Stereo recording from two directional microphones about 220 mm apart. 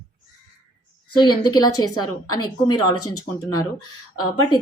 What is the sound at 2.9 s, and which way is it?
Speech, 90° left.